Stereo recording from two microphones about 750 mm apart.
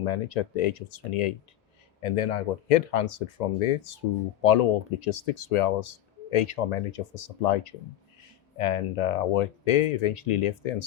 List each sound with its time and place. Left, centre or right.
0.0 s speech: left